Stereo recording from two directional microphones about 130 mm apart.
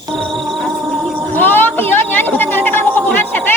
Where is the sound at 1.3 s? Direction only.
15° left (ahead or behind).